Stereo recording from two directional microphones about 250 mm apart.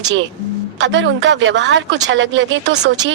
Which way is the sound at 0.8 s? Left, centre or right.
Right.